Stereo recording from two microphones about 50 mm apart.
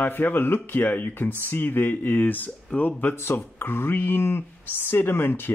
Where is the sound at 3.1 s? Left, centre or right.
Left.